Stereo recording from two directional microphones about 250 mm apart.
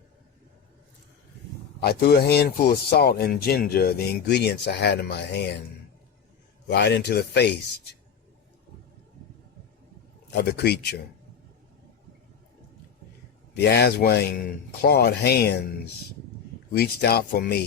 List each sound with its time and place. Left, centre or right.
1.8 s speech: left
6.7 s speech: left
10.3 s speech: left
13.6 s speech: left
16.7 s speech: left